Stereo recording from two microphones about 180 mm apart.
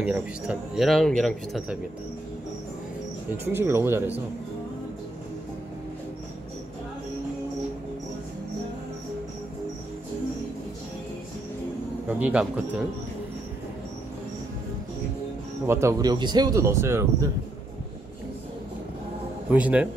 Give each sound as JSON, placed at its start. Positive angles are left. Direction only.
{"t": 0.0, "sound": "speech", "side_deg": -5}
{"t": 3.5, "sound": "speech", "side_deg": -15}
{"t": 12.1, "sound": "speech", "side_deg": -5}
{"t": 15.6, "sound": "speech", "side_deg": -15}
{"t": 19.5, "sound": "speech", "side_deg": -5}